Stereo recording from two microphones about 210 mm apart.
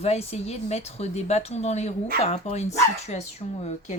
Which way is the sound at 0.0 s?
30° left (ahead or behind).